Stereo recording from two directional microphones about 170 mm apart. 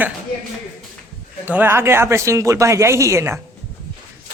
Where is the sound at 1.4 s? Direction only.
10° right (ahead or behind).